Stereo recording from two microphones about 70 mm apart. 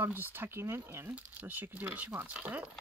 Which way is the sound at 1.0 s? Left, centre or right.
Right.